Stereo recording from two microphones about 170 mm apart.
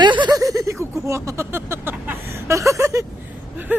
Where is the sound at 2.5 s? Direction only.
20° right (ahead or behind).